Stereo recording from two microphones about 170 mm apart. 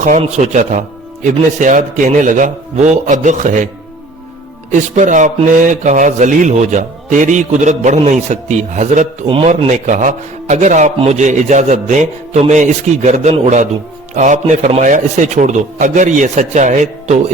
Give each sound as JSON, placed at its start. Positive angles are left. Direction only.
{"t": 0.0, "sound": "speech", "side_deg": -45}
{"t": 4.7, "sound": "speech", "side_deg": -45}
{"t": 9.2, "sound": "a man's voice", "side_deg": -30}
{"t": 9.5, "sound": "speech", "side_deg": -45}